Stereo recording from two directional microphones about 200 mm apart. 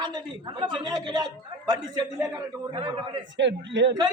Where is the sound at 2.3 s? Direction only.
25° right (ahead or behind).